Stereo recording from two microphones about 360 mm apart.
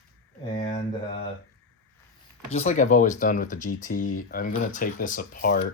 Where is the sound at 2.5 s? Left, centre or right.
Centre.